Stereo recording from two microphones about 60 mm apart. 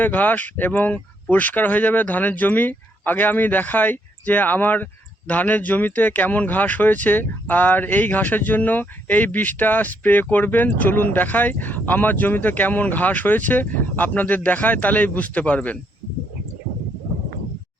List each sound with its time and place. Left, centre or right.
0.0 s speech: left